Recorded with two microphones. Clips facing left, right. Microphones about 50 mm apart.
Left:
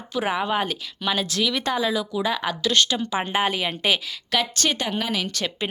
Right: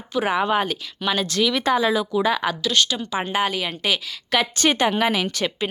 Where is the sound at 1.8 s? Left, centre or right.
Centre.